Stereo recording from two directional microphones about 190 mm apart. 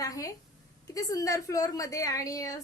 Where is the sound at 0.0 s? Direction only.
15° left (ahead or behind).